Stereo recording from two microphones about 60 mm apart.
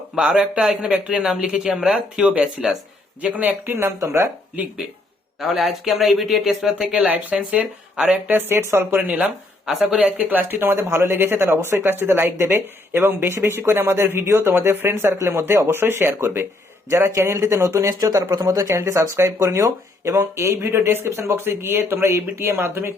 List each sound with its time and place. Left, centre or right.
0.2 s speech: centre
3.2 s speech: right
3.8 s speech: right
5.4 s speech: centre
6.7 s speech: centre
7.6 s speech: centre
8.3 s speech: right
9.2 s speech: centre
10.2 s speech: right
18.0 s speech: right
21.3 s speech: right